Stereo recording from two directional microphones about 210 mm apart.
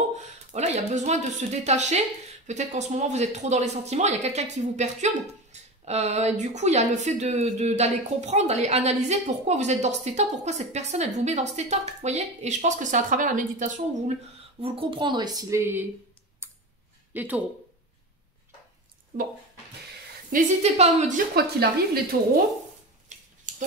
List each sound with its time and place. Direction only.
0.5 s speech: 30° right (ahead or behind)
14.6 s speech: 25° right (ahead or behind)
16.4 s clicking: 10° right (ahead or behind)
17.1 s speech: 10° right (ahead or behind)
20.2 s speech: 35° right (ahead or behind)
21.4 s speech: 50° right (ahead or behind)
23.5 s a sound: 35° right (ahead or behind)